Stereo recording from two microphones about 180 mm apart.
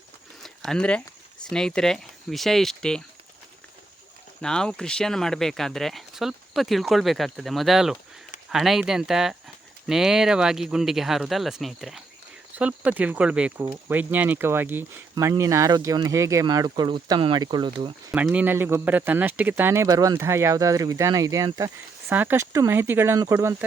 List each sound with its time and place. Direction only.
0.4 s a sound: centre (ahead or behind)
1.5 s speech: 5° left (ahead or behind)
4.4 s speech: 5° left (ahead or behind); by 17.9 s 25° right (ahead or behind)
18.1 s speech: 5° right (ahead or behind)